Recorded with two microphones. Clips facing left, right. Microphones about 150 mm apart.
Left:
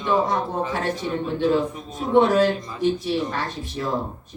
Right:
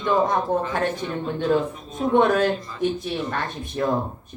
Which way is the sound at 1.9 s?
55° right (ahead or behind).